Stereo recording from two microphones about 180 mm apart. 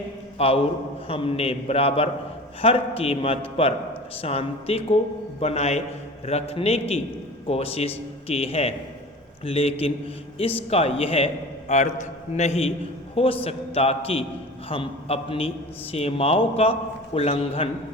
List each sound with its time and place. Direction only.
0.3 s a man's voice: 35° left (ahead or behind)